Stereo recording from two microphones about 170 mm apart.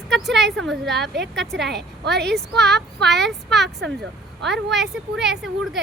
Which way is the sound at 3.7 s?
90° right.